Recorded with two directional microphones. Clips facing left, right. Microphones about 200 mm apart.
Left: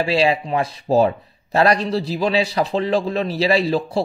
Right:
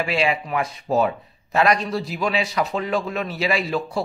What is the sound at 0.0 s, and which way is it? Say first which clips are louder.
A man's voice: left 4 dB; 30° left (ahead or behind).